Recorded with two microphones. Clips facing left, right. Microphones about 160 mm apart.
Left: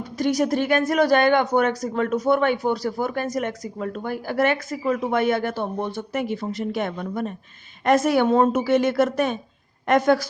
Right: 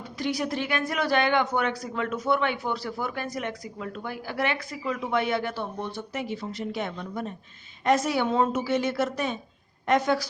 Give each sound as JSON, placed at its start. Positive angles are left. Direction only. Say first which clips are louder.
{"t": 0.2, "sound": "a woman's voice", "louder": "left 7 dB", "side_deg": 45}